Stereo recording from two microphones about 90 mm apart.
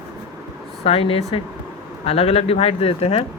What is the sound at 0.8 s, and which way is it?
A man's voice, 90° left.